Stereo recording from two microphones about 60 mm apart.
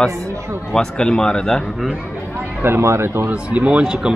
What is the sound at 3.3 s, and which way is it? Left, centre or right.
Speech, centre.